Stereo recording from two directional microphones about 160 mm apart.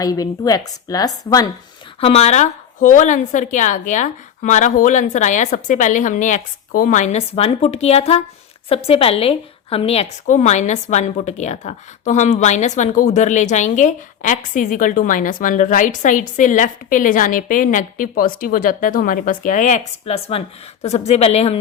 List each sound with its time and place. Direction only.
0.0 s a woman's voice: 25° left (ahead or behind)
2.0 s a woman's voice: 40° left (ahead or behind)